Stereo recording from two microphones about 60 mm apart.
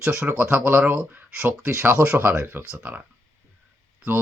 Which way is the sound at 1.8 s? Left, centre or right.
Right.